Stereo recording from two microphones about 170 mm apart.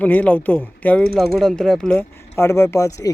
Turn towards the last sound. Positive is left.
turn(degrees=20)  # may be behind; listen again after turning